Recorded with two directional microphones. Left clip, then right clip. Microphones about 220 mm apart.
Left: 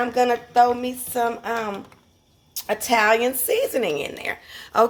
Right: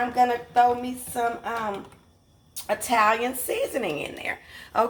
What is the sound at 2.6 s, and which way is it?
A woman's voice, 50° left (ahead or behind).